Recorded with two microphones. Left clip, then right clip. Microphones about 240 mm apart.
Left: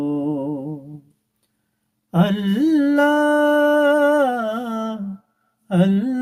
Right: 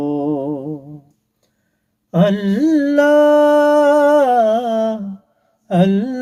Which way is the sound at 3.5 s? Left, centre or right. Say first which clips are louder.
Right 4 dB; centre.